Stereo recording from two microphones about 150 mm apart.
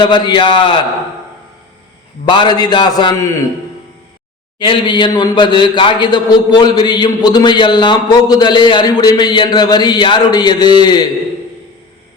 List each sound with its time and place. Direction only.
0.0 s a man's voice: 30° left (ahead or behind)
2.2 s a man's voice: 30° left (ahead or behind)
4.6 s a man's voice: 30° left (ahead or behind)